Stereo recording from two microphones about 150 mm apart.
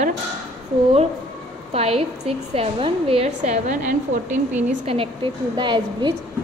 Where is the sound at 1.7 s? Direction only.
40° right (ahead or behind).